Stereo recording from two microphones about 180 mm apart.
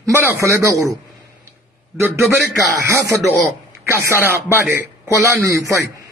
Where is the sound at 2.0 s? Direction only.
15° right (ahead or behind).